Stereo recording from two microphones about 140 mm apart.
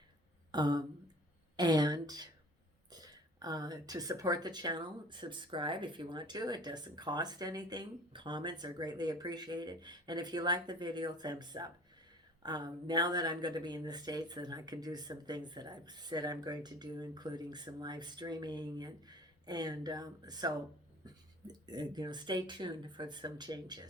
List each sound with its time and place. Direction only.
0.5 s a woman's voice: 30° right (ahead or behind)